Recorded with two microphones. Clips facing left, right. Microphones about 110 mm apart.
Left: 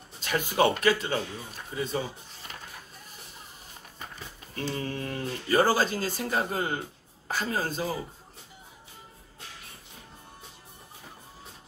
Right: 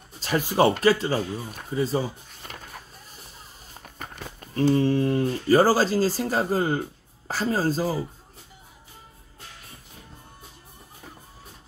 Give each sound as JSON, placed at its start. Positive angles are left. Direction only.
{"t": 0.2, "sound": "speech", "side_deg": -35}
{"t": 4.0, "sound": "a sound", "side_deg": -55}
{"t": 4.7, "sound": "speech", "side_deg": -30}